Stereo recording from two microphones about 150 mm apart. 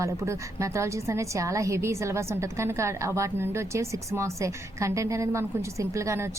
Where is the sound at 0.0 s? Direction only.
20° right (ahead or behind).